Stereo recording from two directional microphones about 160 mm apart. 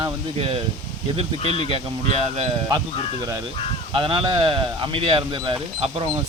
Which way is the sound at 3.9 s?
35° right (ahead or behind).